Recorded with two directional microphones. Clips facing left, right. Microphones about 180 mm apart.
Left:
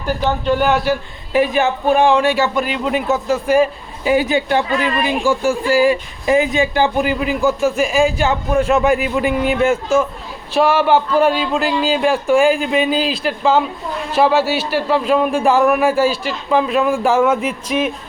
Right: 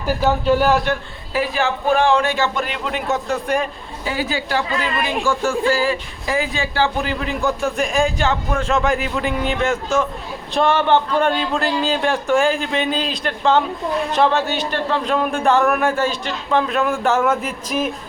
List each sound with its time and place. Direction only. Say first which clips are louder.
0.4 s speech: left 2 dB; centre (ahead or behind)
1.3 s speech: left 5 dB; 20° left (ahead or behind)
4.1 s speech: left 7 dB; 20° left (ahead or behind); by 17.8 s 5° left (ahead or behind)